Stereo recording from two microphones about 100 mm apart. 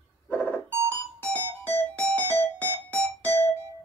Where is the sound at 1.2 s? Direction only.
15° left (ahead or behind).